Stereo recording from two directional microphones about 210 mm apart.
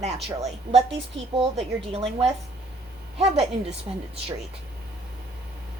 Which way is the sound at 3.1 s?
30° right (ahead or behind).